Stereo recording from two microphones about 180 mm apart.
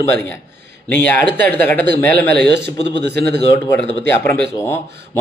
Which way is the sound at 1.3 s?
65° right (ahead or behind).